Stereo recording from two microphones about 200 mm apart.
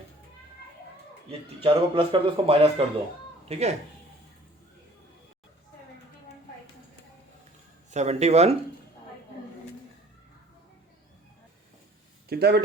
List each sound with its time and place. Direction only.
1.3 s a man's voice: 25° right (ahead or behind)
7.9 s speech: 35° right (ahead or behind)
12.3 s speech: 55° right (ahead or behind)